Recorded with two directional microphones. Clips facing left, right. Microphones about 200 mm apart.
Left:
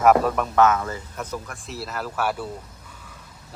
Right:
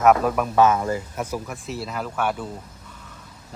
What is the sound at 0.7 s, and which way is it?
Speech, 30° right (ahead or behind).